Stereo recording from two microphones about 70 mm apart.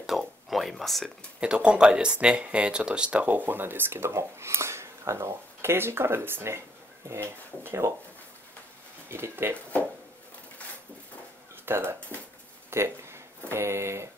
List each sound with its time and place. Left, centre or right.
0.1 s a sound: centre
0.5 s speech: centre
1.4 s speech: centre; by 7.9 s right
9.1 s speech: right
11.6 s speech: right
12.6 s a sound: right
13.5 s speech: right